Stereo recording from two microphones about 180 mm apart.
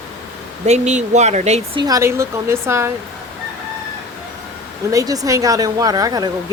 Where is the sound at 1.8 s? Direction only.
15° right (ahead or behind).